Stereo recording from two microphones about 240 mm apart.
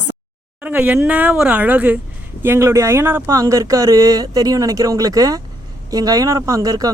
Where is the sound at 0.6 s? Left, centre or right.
Centre.